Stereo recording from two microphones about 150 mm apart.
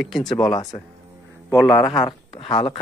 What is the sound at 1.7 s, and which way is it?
Speech, centre (ahead or behind).